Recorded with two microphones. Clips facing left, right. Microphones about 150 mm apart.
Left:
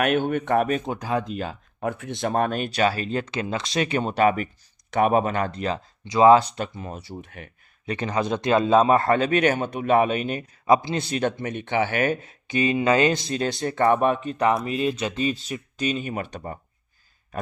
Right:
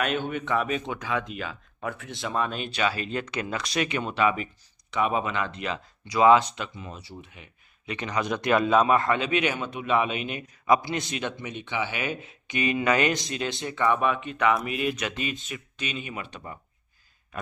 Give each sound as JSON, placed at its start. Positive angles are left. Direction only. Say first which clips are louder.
{"t": 0.0, "sound": "speech", "louder": "left 6 dB", "side_deg": 55}
{"t": 7.8, "sound": "speech", "louder": "left 4 dB", "side_deg": 35}
{"t": 10.8, "sound": "speech", "louder": "left 6 dB", "side_deg": 25}